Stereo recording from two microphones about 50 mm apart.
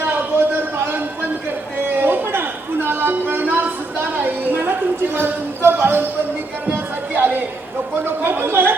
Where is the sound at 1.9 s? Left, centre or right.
Right.